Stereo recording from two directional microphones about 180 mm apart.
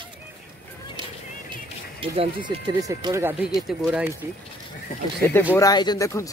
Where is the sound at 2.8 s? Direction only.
20° right (ahead or behind).